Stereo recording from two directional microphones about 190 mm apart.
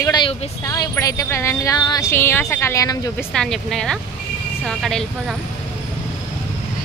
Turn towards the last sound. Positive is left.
turn(degrees=0)  # may be behind; listen again after turning